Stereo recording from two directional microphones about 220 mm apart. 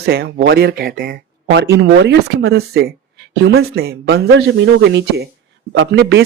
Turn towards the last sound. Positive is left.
turn(degrees=-55)  # may be behind; listen again after turning